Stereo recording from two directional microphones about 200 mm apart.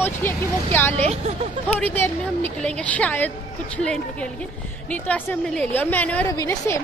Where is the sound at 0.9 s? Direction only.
35° right (ahead or behind).